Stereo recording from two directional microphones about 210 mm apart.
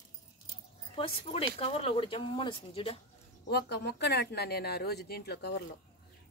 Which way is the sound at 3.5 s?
50° left (ahead or behind).